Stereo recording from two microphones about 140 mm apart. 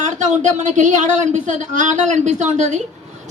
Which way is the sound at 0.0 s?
60° right (ahead or behind).